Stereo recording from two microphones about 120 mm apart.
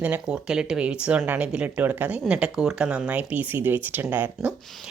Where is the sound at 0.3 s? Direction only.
5° right (ahead or behind).